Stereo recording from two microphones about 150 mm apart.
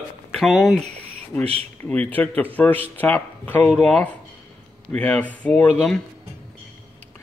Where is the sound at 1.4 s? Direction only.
40° right (ahead or behind).